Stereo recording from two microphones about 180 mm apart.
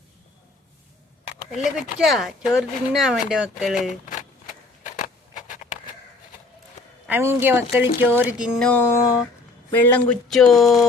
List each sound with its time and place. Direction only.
1.5 s speech: centre (ahead or behind)
4.8 s a sound: 45° left (ahead or behind)
7.1 s speech: 10° right (ahead or behind); by 9.2 s 20° left (ahead or behind)
9.8 s speech: 5° left (ahead or behind)